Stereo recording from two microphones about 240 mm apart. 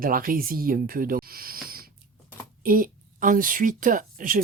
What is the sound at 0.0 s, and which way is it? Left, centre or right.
Speech, right.